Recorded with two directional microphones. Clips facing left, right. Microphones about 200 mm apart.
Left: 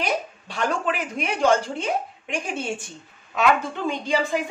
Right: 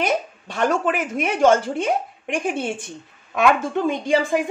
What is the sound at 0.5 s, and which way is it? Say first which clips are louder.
Speech: right 5 dB; 50° right (ahead or behind).